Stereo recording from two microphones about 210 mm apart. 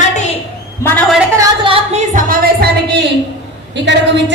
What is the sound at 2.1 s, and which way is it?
Music, 45° right (ahead or behind).